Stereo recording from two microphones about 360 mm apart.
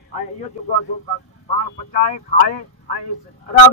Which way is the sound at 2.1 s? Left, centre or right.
Left.